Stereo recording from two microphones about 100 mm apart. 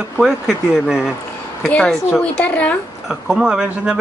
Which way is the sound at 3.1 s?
5° right (ahead or behind).